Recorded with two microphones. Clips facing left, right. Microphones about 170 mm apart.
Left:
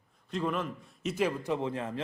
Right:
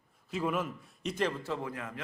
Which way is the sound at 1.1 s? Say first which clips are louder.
Left 3 dB; 10° left (ahead or behind).